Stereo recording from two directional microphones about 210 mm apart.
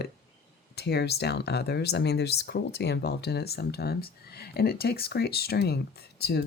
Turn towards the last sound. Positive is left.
turn(degrees=50)  # may be behind; listen again after turning